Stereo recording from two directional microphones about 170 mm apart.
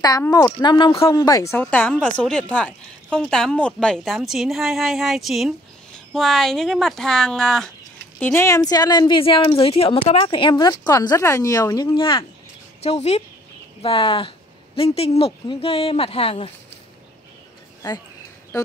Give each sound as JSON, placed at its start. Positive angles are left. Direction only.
{"t": 0.3, "sound": "a woman's voice", "side_deg": 20}